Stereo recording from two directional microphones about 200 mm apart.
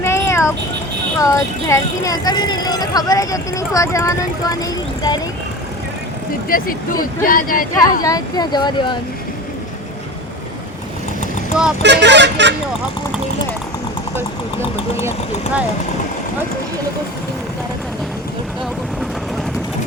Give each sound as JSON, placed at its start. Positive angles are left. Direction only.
{"t": 0.0, "sound": "a sound", "side_deg": 15}
{"t": 1.2, "sound": "speech", "side_deg": 15}
{"t": 6.5, "sound": "speech", "side_deg": 45}
{"t": 8.0, "sound": "speech", "side_deg": 20}
{"t": 11.8, "sound": "speech", "side_deg": -60}